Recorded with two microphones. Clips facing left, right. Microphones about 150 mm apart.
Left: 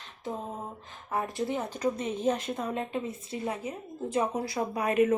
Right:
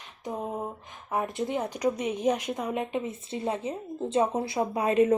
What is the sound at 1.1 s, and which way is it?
Speech, 20° right (ahead or behind).